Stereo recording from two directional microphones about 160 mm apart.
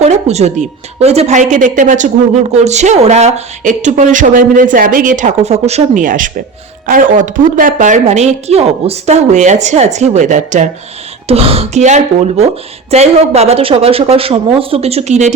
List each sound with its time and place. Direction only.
0.0 s speech: 45° right (ahead or behind)
11.3 s speech: 40° right (ahead or behind)